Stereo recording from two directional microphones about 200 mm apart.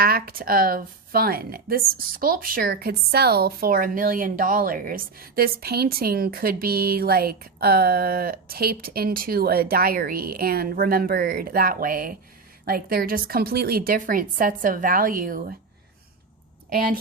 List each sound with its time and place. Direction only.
0.0 s speech: 50° right (ahead or behind)
16.7 s speech: 45° right (ahead or behind)